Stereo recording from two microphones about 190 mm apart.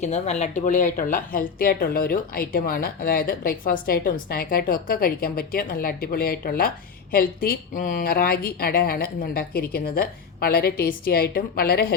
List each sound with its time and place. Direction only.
0.0 s speech: 35° left (ahead or behind); by 11.9 s 50° left (ahead or behind)